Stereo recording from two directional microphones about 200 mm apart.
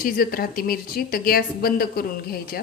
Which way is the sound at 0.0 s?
50° left (ahead or behind).